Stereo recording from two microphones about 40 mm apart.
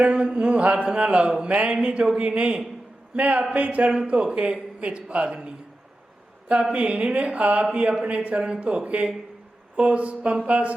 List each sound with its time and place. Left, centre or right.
0.0 s speech: right
3.9 s speech: right